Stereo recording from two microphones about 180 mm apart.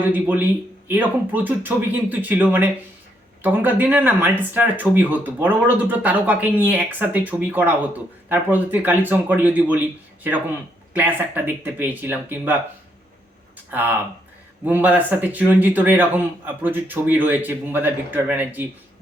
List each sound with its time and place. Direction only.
0.0 s speech: 10° right (ahead or behind)
10.9 s speech: 10° right (ahead or behind)
13.7 s speech: 10° right (ahead or behind)